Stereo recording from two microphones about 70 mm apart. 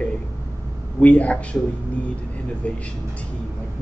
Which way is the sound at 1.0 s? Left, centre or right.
Centre.